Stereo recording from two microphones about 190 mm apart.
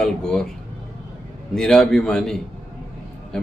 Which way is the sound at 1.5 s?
5° left (ahead or behind).